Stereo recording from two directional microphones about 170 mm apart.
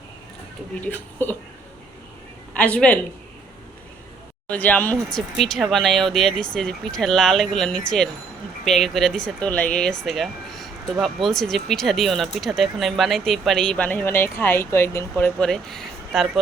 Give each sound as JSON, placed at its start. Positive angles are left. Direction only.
{"t": 0.9, "sound": "speech", "side_deg": 10}
{"t": 2.6, "sound": "speech", "side_deg": 5}
{"t": 4.4, "sound": "speech", "side_deg": 10}